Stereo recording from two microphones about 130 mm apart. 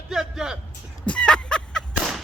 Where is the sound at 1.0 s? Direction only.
10° left (ahead or behind).